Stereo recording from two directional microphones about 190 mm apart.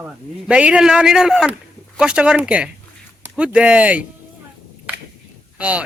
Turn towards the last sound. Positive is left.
turn(degrees=-5)  # may be behind; listen again after turning